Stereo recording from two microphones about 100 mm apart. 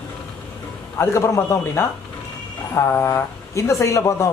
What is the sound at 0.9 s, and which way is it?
A woman's voice, 30° left (ahead or behind).